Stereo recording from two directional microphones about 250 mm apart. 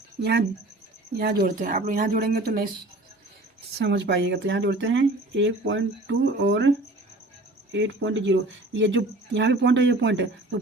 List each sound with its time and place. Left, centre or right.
0.2 s speech: right
3.8 s speech: right